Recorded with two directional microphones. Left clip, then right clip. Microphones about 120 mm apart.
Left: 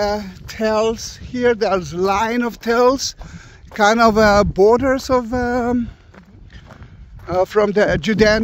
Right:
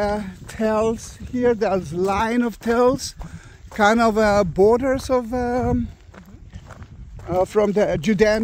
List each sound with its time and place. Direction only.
0.0 s speech: 70° left (ahead or behind)
0.6 s speech: 40° left (ahead or behind)
7.2 s speech: 45° left (ahead or behind)